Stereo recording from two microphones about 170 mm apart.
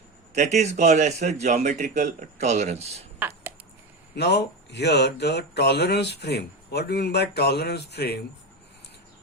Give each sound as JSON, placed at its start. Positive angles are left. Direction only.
{"t": 0.3, "sound": "a man's voice", "side_deg": -40}
{"t": 3.2, "sound": "a sound", "side_deg": -10}
{"t": 4.1, "sound": "speech", "side_deg": 75}